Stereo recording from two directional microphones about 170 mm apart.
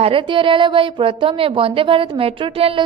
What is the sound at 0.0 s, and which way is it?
A woman's voice, 30° right (ahead or behind).